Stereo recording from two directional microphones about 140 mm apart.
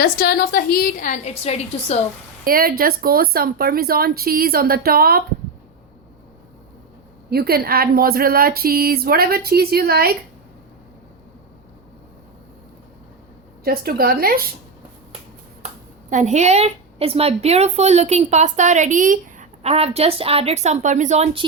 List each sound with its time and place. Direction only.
0.0 s a woman's voice: 90° left; by 2.0 s 50° left (ahead or behind)
2.4 s speech: 90° right
7.3 s speech: 90° right
13.7 s speech: 90° right
16.0 s a woman's voice: 60° right (ahead or behind)
19.6 s a woman's voice: 45° right (ahead or behind)